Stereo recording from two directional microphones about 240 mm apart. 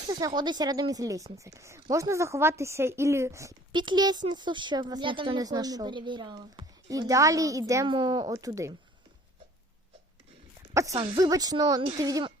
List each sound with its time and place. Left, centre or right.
0.0 s speech: centre
10.8 s speech: centre